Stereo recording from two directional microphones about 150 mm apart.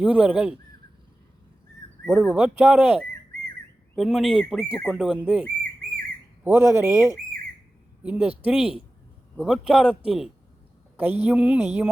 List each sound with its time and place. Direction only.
0.0 s a woman's voice: 10° right (ahead or behind)
2.0 s a woman's voice: centre (ahead or behind)
3.9 s a man's voice: centre (ahead or behind)
6.4 s a woman's voice: 15° right (ahead or behind)